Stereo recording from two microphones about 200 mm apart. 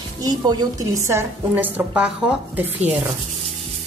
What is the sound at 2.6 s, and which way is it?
Speech, 35° right (ahead or behind).